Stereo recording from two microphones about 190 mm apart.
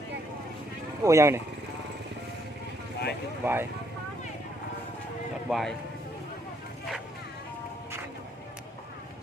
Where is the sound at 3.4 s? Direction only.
10° right (ahead or behind).